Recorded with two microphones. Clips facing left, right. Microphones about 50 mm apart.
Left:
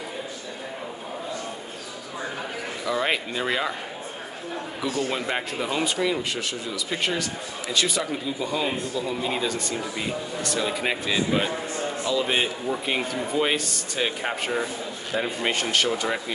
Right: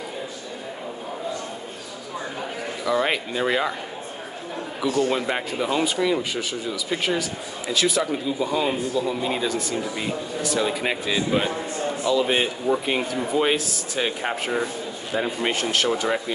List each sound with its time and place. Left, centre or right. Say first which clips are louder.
2.8 s speech: right 3 dB; centre
4.9 s speech: right 4 dB; centre